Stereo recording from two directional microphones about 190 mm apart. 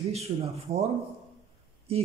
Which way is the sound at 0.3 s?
30° right (ahead or behind).